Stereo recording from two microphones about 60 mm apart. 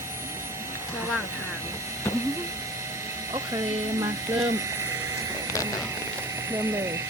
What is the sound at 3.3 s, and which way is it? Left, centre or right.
Speech, right.